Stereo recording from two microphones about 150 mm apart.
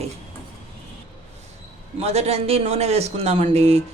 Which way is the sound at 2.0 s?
45° right (ahead or behind).